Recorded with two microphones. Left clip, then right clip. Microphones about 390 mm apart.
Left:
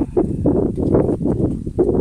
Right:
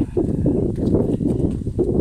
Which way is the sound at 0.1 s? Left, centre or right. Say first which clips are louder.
Left 3 dB; left.